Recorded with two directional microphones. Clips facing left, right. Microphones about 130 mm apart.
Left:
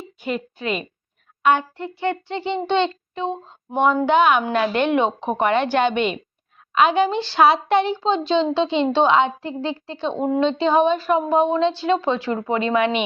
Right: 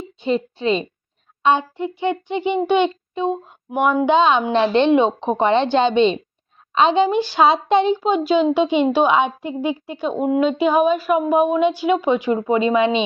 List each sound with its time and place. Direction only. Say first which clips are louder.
0.0 s a woman's voice: right 6 dB; 25° right (ahead or behind)